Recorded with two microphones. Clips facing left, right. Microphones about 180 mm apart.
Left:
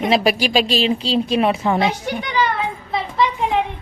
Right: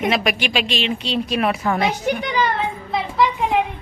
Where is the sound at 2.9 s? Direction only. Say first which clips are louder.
Right 1 dB; centre (ahead or behind).